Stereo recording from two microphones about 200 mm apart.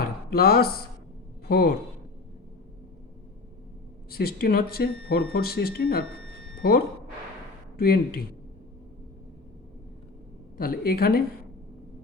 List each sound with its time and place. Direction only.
0.3 s a man's voice: 50° left (ahead or behind)
4.1 s speech: 50° left (ahead or behind)
10.6 s speech: 50° left (ahead or behind)